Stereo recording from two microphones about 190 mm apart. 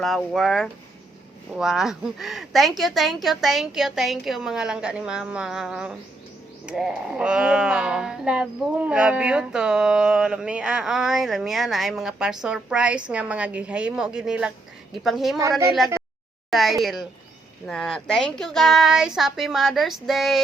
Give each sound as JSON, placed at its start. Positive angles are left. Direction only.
{"t": 0.0, "sound": "speech", "side_deg": 0}
{"t": 15.4, "sound": "speech", "side_deg": -15}
{"t": 16.5, "sound": "speech", "side_deg": 0}